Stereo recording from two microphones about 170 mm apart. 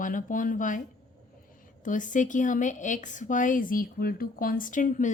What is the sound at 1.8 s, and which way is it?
A woman's voice, 50° left (ahead or behind).